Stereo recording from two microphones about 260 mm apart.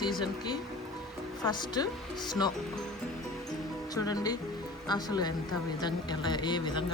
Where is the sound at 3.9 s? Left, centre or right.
Centre.